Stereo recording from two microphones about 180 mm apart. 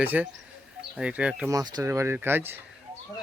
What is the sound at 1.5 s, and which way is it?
Speech, 20° right (ahead or behind).